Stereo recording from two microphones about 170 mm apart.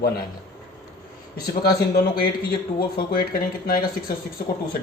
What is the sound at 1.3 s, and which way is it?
A man's voice, 70° left (ahead or behind).